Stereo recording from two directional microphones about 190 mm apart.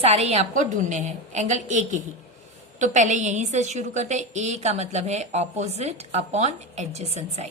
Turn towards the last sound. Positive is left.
turn(degrees=-35)  # may be behind; listen again after turning